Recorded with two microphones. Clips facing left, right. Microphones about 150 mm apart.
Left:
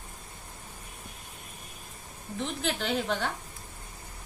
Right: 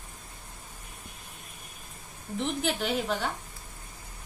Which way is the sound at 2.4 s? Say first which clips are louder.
Right 2 dB; 10° right (ahead or behind).